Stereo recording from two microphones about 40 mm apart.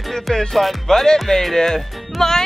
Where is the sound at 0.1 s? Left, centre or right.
Centre.